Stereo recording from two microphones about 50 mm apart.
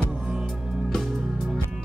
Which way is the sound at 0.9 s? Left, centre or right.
Centre.